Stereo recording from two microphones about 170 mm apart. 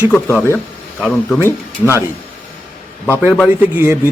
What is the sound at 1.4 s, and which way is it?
Speech, 15° left (ahead or behind).